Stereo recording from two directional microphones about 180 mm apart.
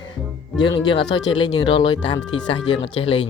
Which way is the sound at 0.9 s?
30° left (ahead or behind).